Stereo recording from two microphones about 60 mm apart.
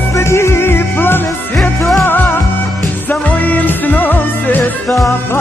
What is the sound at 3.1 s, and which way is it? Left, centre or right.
Music, left.